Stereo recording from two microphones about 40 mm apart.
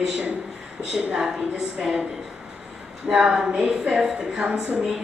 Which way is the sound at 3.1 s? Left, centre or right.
Right.